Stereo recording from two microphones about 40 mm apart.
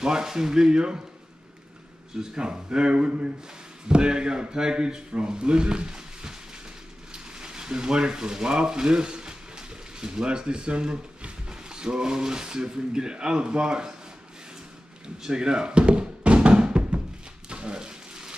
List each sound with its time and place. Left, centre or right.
0.0 s speech: centre
2.1 s speech: centre
7.1 s a sound: centre
10.2 s speech: right
15.2 s music: centre
17.5 s a sound: right